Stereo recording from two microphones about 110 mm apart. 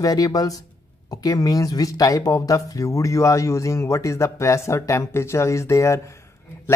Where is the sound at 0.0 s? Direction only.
35° left (ahead or behind).